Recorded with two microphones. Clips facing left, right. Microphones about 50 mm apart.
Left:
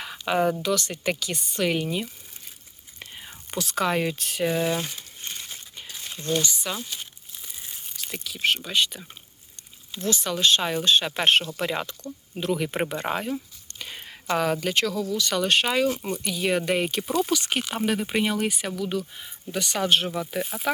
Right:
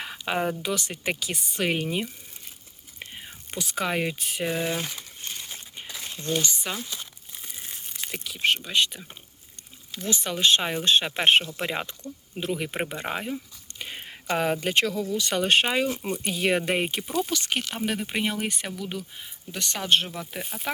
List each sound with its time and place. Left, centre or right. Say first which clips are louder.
0.0 s a sound: left 4 dB; centre
0.6 s speech: left 3 dB; centre
1.5 s speech: left 2 dB; right
3.2 s speech: left 4 dB; centre
5.3 s a sound: even; centre
5.5 s a sound: right 1 dB; right
6.4 s speech: left 1 dB; right
8.1 s speech: even; centre
10.1 s speech: even; centre
11.1 s speech: right 1 dB; centre
16.2 s speech: even; right
17.0 s speech: left 3 dB; centre